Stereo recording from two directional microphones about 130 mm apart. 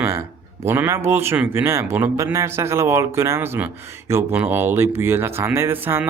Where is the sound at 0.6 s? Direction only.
20° right (ahead or behind).